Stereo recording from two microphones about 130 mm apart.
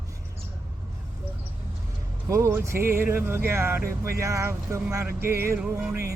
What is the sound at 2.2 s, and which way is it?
Speech, 20° right (ahead or behind).